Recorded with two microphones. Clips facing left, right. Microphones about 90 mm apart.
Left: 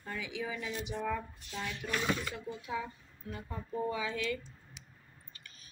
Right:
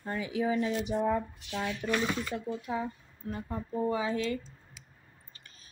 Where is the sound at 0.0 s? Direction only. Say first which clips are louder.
Right 8 dB; 40° right (ahead or behind).